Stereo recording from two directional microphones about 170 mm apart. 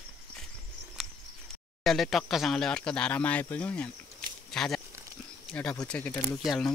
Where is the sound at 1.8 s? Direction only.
Centre (ahead or behind).